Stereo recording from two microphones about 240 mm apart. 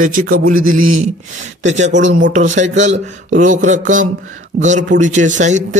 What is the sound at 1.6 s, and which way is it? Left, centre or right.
Speech, right.